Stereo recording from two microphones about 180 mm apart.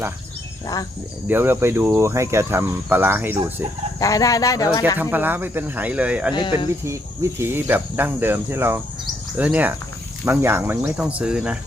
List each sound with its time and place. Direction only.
1.3 s cricket: 10° right (ahead or behind)
4.0 s speech: 20° left (ahead or behind)
4.9 s cricket: 10° right (ahead or behind)
6.3 s speech: 25° left (ahead or behind)
6.8 s cricket: 15° right (ahead or behind)